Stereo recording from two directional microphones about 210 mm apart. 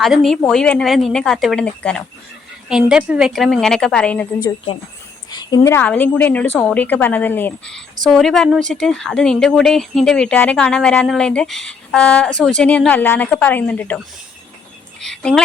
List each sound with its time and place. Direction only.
0.0 s speech: centre (ahead or behind)
4.4 s a woman's voice: 25° left (ahead or behind); by 14.0 s 10° left (ahead or behind)
15.0 s speech: 5° left (ahead or behind)